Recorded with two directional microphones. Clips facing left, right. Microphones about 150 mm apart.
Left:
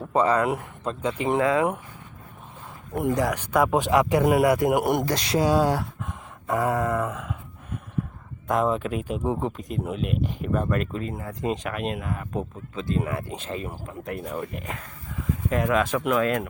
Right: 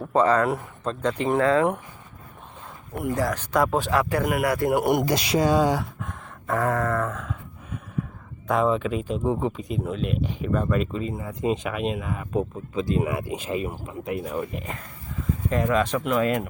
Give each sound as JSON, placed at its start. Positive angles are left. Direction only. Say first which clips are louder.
{"t": 0.1, "sound": "speech", "louder": "right 1 dB", "side_deg": 10}
{"t": 2.9, "sound": "speech", "louder": "left 2 dB", "side_deg": 20}
{"t": 4.9, "sound": "speech", "louder": "right 2 dB", "side_deg": -5}
{"t": 5.4, "sound": "a sound", "louder": "even", "side_deg": 5}
{"t": 8.4, "sound": "speech", "louder": "right 1 dB", "side_deg": 5}